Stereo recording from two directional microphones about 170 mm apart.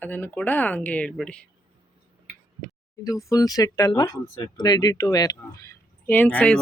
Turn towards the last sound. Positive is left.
turn(degrees=5)  # may be behind; listen again after turning